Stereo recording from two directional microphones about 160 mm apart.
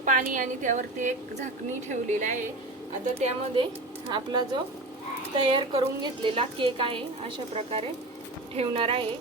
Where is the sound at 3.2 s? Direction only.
35° right (ahead or behind).